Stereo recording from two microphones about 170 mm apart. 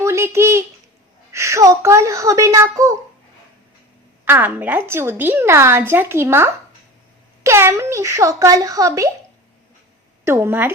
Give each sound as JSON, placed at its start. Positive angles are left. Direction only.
{"t": 0.0, "sound": "a sound", "side_deg": -15}
{"t": 1.3, "sound": "a woman's voice", "side_deg": -15}
{"t": 4.3, "sound": "a woman's voice", "side_deg": -10}
{"t": 10.2, "sound": "a woman's voice", "side_deg": -15}